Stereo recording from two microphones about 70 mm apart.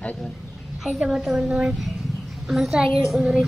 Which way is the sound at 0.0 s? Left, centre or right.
Centre.